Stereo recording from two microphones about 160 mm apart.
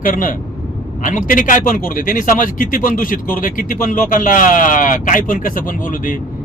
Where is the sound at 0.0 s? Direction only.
60° left (ahead or behind).